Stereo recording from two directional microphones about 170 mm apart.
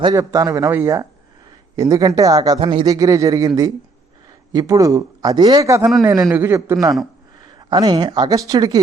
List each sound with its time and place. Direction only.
0.0 s a man's voice: 20° right (ahead or behind)